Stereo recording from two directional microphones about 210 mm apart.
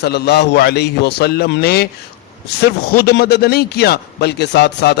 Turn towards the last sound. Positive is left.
turn(degrees=55)  # may be behind; listen again after turning